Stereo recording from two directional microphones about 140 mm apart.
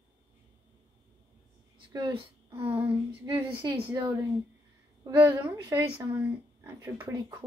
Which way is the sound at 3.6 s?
35° right (ahead or behind).